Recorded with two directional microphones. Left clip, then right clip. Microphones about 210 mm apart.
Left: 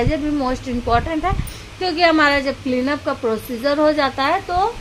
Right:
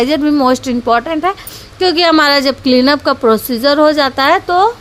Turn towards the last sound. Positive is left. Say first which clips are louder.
# right 8 dB
turn(degrees=-25)  # may be behind; listen again after turning